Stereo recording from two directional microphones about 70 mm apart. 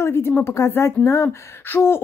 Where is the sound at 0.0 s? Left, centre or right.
Left.